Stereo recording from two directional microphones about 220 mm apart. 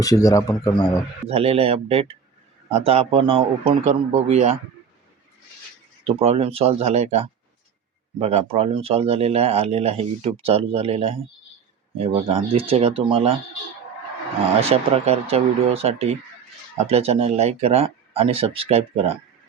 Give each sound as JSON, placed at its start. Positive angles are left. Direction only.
{"t": 0.0, "sound": "speech", "side_deg": 15}
{"t": 1.3, "sound": "speech", "side_deg": -25}
{"t": 6.1, "sound": "speech", "side_deg": -25}
{"t": 14.6, "sound": "speech", "side_deg": -25}